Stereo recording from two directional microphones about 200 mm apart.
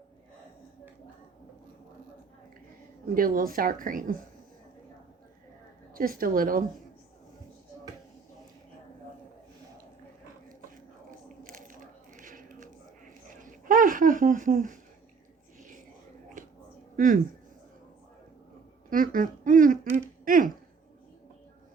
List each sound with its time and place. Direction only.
3.2 s speech: 45° right (ahead or behind)
5.9 s speech: 45° right (ahead or behind)
11.4 s a sound: 40° right (ahead or behind)
18.9 s speech: 45° right (ahead or behind)